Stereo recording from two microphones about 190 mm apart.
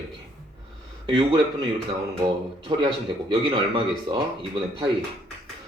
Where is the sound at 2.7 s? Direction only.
25° right (ahead or behind).